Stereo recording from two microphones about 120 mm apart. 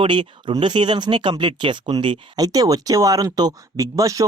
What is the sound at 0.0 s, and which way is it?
Speech, 45° right (ahead or behind).